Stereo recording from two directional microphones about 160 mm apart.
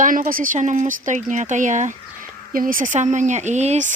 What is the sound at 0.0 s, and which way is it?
Speech, 60° right (ahead or behind).